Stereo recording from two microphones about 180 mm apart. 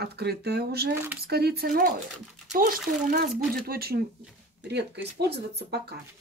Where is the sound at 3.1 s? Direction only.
55° right (ahead or behind).